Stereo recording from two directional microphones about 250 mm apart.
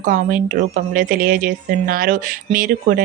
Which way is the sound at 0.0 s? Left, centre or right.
Right.